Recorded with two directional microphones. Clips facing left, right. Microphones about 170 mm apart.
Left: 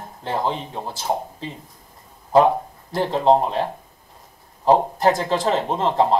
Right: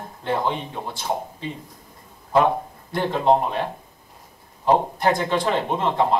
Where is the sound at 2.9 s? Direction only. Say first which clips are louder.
Left 2 dB; 35° left (ahead or behind).